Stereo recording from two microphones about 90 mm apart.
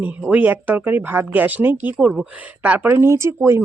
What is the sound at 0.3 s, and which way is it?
Speech, 20° right (ahead or behind).